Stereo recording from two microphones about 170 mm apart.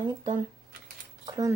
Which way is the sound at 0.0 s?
25° right (ahead or behind).